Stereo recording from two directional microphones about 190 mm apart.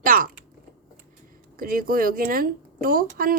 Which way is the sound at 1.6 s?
50° right (ahead or behind).